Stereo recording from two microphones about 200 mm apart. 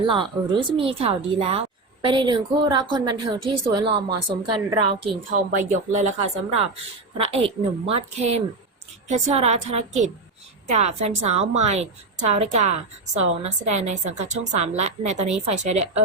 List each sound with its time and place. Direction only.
0.1 s speech: 25° right (ahead or behind)
5.3 s a woman's voice: 40° right (ahead or behind)